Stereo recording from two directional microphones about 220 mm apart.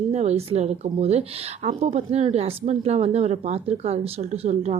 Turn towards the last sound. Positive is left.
turn(degrees=-30)  # may be behind; listen again after turning